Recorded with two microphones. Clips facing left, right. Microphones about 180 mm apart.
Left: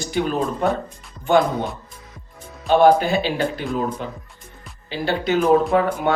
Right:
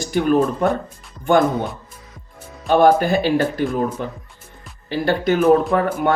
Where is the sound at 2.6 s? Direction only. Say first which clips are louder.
Even; 50° right (ahead or behind).